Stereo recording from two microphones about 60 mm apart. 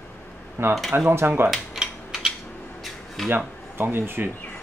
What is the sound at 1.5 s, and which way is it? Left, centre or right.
Cutlery, centre.